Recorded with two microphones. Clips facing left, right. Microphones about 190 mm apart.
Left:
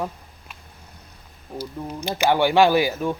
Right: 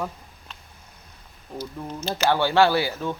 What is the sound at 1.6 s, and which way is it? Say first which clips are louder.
Speech: left 2 dB; 10° left (ahead or behind).